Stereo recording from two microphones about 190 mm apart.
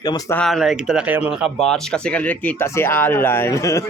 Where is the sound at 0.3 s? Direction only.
Centre (ahead or behind).